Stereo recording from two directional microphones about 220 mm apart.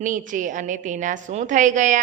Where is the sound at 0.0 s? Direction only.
35° right (ahead or behind).